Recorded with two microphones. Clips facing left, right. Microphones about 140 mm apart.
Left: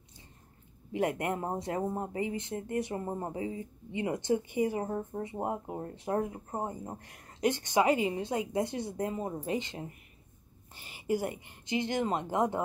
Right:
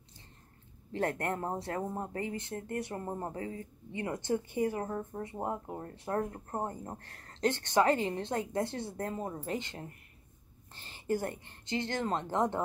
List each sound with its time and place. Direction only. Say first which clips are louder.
0.9 s a woman's voice: left 2 dB; 15° left (ahead or behind)